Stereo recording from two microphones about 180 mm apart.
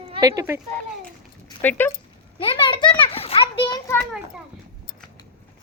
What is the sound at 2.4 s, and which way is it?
Children playing, 30° left (ahead or behind).